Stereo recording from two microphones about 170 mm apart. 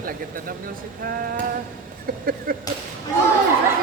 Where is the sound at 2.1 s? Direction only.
60° right (ahead or behind).